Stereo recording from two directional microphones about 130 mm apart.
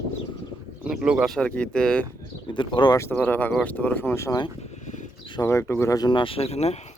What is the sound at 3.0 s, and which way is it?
Speech, 15° left (ahead or behind).